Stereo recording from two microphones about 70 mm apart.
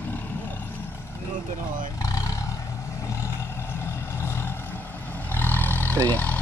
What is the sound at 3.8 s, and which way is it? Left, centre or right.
Vehicle, left.